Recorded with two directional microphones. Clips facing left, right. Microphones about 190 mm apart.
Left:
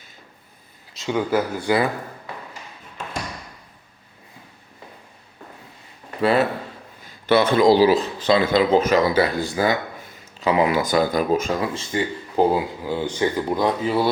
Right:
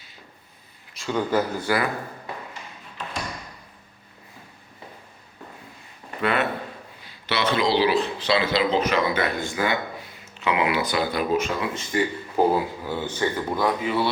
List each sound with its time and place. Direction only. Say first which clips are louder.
0.9 s speech: left 2 dB; 15° left (ahead or behind)
6.2 s speech: left 5 dB; 35° left (ahead or behind)
7.0 s speech: left 8 dB; 50° left (ahead or behind); by 11.9 s 30° left (ahead or behind)
12.4 s speech: left 2 dB; 20° left (ahead or behind)
13.8 s speech: left 3 dB; 40° left (ahead or behind)